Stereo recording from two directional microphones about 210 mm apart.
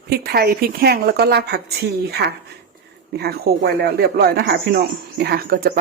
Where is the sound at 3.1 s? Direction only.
50° right (ahead or behind).